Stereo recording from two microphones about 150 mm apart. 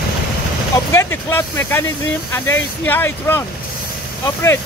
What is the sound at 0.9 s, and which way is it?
Speech, 15° left (ahead or behind).